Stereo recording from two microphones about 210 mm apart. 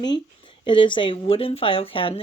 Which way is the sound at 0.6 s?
20° left (ahead or behind).